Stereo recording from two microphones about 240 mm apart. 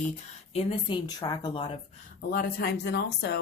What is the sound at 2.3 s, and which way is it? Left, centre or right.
Speech, left.